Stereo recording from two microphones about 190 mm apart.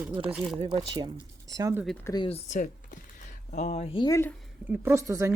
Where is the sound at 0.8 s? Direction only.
25° right (ahead or behind).